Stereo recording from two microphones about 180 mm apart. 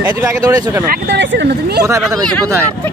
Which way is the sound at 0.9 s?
70° right (ahead or behind).